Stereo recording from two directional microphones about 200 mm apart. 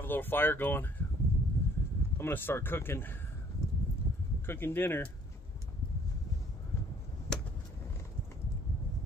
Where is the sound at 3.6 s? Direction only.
15° left (ahead or behind).